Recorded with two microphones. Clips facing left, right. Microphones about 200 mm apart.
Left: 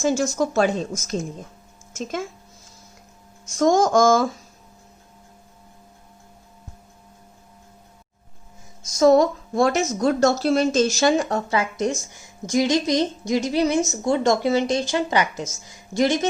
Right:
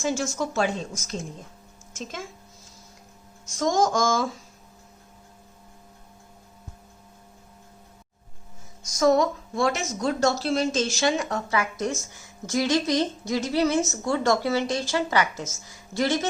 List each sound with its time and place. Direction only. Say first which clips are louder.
0.0 s speech: left 6 dB; 40° left (ahead or behind)
3.6 s music: left 6 dB; 55° left (ahead or behind)
9.0 s a woman's voice: left 5 dB; 30° left (ahead or behind); by 16.3 s 15° left (ahead or behind)